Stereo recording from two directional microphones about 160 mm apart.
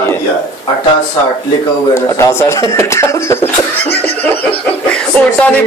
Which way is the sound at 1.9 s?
15° left (ahead or behind).